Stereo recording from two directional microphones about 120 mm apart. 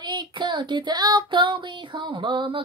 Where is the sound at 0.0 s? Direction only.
40° right (ahead or behind).